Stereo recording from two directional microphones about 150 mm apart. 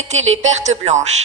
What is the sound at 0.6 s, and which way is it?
Speech, 50° right (ahead or behind).